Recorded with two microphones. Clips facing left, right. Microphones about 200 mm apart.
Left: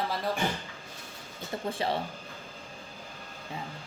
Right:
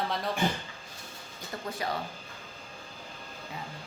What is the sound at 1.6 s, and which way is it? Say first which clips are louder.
Speech: left 3 dB; 30° left (ahead or behind).